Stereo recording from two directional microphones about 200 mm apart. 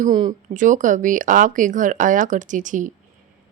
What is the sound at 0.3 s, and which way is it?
Speech, 40° right (ahead or behind).